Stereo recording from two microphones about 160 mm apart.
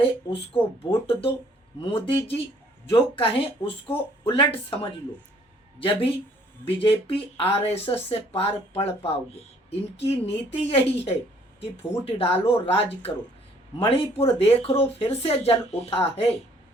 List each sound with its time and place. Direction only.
0.0 s speech: 35° left (ahead or behind)
6.7 s speech: 35° left (ahead or behind)